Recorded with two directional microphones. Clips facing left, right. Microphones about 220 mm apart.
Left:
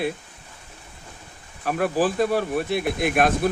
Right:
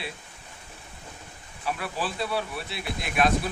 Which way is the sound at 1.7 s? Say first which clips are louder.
Left 9 dB; 50° left (ahead or behind).